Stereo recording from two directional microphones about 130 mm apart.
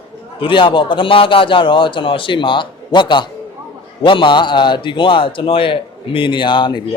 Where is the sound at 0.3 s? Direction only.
40° left (ahead or behind).